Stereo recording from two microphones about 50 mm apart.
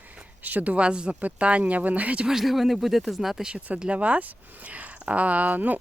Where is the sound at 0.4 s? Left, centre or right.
Right.